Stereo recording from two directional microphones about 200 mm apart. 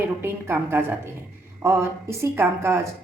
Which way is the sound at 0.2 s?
10° right (ahead or behind).